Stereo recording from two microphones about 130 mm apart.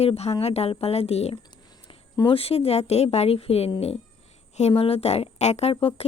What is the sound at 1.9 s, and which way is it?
A woman's voice, 40° left (ahead or behind).